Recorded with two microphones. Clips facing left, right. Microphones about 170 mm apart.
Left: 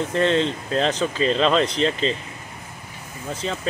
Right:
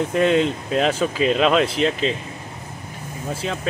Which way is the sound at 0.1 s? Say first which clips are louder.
Right 2 dB; 10° right (ahead or behind).